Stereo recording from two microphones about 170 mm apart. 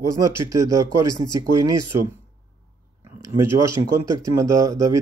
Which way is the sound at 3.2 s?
20° right (ahead or behind).